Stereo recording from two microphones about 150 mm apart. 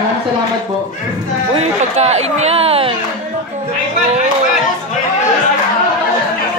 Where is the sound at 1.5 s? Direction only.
45° right (ahead or behind).